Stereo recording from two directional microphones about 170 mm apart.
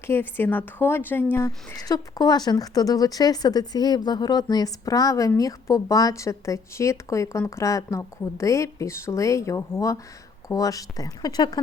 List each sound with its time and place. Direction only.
0.1 s a woman's voice: 10° left (ahead or behind)